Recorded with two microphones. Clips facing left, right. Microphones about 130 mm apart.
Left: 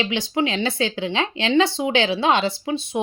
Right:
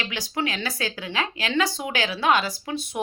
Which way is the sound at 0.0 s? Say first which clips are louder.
Left 6 dB; 20° left (ahead or behind).